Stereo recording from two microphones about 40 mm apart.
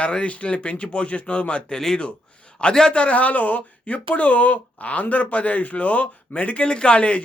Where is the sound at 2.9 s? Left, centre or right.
Left.